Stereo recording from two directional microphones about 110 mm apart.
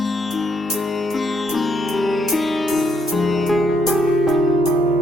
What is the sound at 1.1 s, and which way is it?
Music, centre (ahead or behind).